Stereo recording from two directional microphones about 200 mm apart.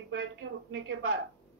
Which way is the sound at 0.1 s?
65° right (ahead or behind).